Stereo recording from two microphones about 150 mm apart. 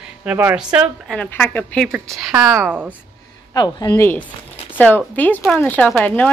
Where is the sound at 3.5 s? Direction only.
25° left (ahead or behind).